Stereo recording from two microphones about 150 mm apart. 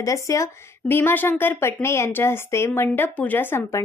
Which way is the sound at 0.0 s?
20° left (ahead or behind).